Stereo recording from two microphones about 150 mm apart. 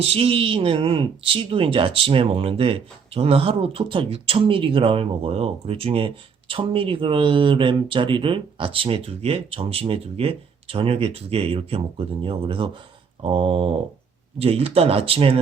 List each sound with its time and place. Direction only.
0.0 s speech: 40° right (ahead or behind)